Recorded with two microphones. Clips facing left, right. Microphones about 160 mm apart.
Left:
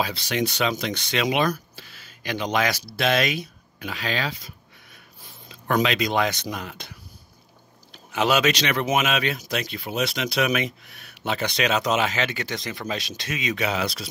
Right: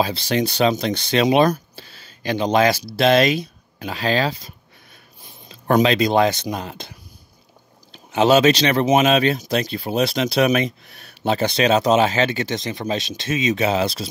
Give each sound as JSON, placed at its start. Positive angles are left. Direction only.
{"t": 0.0, "sound": "speech", "side_deg": -30}
{"t": 1.5, "sound": "a sound", "side_deg": -30}
{"t": 3.0, "sound": "speech", "side_deg": -30}
{"t": 5.5, "sound": "speech", "side_deg": -35}